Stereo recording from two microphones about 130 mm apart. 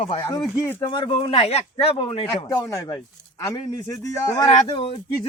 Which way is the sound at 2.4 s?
25° left (ahead or behind).